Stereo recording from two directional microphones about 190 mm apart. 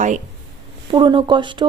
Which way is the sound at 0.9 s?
25° right (ahead or behind).